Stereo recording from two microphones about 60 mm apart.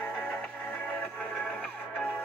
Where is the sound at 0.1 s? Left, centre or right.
Centre.